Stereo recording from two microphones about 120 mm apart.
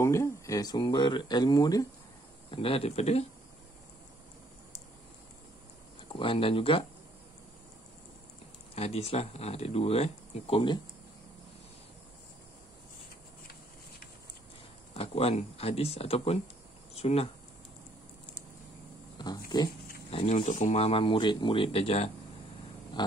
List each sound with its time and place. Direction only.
0.0 s speech: 25° left (ahead or behind)
2.5 s speech: 50° left (ahead or behind)
6.1 s speech: 50° left (ahead or behind)
8.7 s speech: 60° left (ahead or behind)
15.0 s speech: 55° left (ahead or behind)
19.1 s speech: 35° left (ahead or behind)
20.1 s speech: 50° left (ahead or behind)
20.4 s speech: 75° left (ahead or behind); by 22.1 s 55° left (ahead or behind)
23.0 s speech: 35° left (ahead or behind)